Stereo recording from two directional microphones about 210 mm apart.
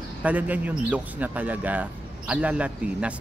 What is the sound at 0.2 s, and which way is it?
Speech, 5° right (ahead or behind).